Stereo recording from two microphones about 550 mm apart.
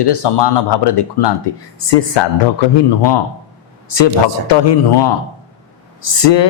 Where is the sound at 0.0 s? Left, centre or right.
Left.